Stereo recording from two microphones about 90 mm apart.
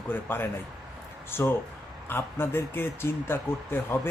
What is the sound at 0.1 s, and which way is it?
Speech, 25° left (ahead or behind).